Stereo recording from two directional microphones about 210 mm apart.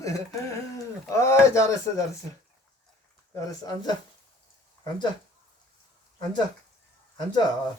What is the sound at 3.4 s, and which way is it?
Speech, 20° left (ahead or behind).